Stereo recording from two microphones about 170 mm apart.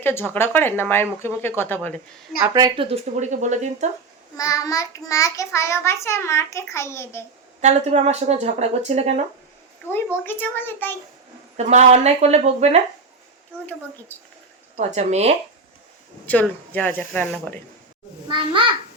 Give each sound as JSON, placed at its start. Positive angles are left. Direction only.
{"t": 0.0, "sound": "a child's voice", "side_deg": 15}
{"t": 2.4, "sound": "speech", "side_deg": -20}
{"t": 4.4, "sound": "a child's voice", "side_deg": 20}
{"t": 7.6, "sound": "speech", "side_deg": -40}
{"t": 10.2, "sound": "a child's voice", "side_deg": 10}
{"t": 11.5, "sound": "speech", "side_deg": -45}
{"t": 14.1, "sound": "a child's voice", "side_deg": 10}
{"t": 14.8, "sound": "speech", "side_deg": -40}
{"t": 16.2, "sound": "a child's voice", "side_deg": 10}